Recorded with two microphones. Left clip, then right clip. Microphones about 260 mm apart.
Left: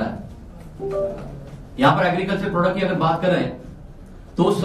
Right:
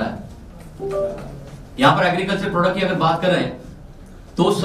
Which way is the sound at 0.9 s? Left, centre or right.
Centre.